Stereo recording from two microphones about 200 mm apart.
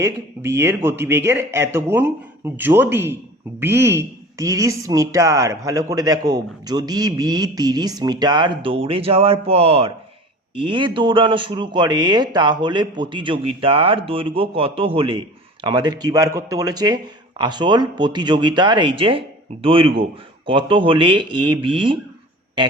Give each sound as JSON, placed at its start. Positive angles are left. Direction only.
{"t": 0.0, "sound": "a woman's voice", "side_deg": -10}